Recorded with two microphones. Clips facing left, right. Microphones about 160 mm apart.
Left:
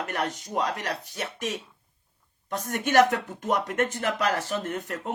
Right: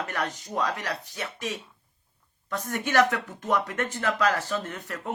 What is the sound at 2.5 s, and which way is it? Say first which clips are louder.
Speech: left 1 dB; 45° left (ahead or behind).